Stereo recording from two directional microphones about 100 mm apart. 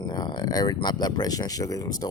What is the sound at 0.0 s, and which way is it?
Speech, 45° left (ahead or behind).